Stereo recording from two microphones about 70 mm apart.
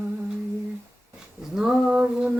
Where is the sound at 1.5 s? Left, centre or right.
Centre.